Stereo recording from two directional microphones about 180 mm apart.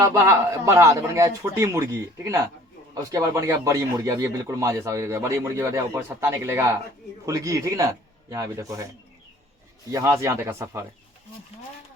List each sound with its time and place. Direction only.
0.0 s a man's voice: 15° right (ahead or behind)
9.9 s a man's voice: 15° right (ahead or behind)